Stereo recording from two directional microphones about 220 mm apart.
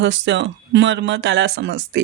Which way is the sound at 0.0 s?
55° right (ahead or behind).